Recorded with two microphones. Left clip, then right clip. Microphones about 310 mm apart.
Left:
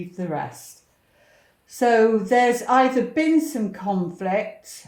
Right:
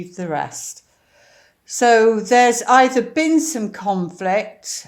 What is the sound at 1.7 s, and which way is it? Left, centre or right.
A woman's voice, right.